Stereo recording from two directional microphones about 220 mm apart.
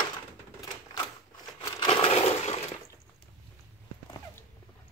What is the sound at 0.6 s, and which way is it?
Crushing, 20° left (ahead or behind).